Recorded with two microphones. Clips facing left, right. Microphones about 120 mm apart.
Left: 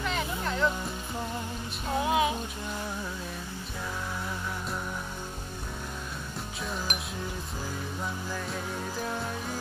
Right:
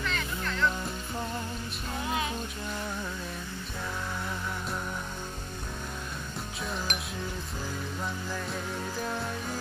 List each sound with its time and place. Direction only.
0.0 s music: 15° left (ahead or behind)
2.0 s music: 15° left (ahead or behind)
6.6 s music: centre (ahead or behind)
9.0 s music: centre (ahead or behind)